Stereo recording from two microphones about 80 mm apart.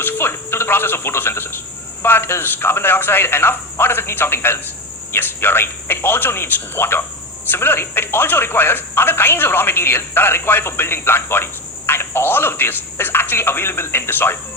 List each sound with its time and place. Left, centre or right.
0.0 s speech: left